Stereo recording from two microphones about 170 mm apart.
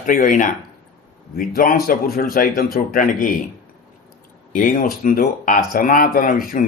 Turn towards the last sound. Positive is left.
turn(degrees=55)  # may be behind; listen again after turning